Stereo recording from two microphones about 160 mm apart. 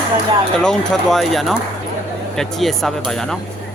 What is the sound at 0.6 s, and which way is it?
Speech, 5° left (ahead or behind).